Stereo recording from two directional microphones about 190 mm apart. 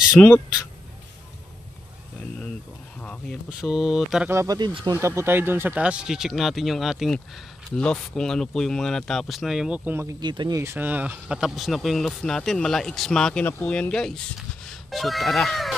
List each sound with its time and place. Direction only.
0.2 s speech: 5° left (ahead or behind)
3.0 s a sound: 5° left (ahead or behind)
3.4 s speech: centre (ahead or behind)
4.3 s speech: 15° right (ahead or behind); by 15.7 s centre (ahead or behind)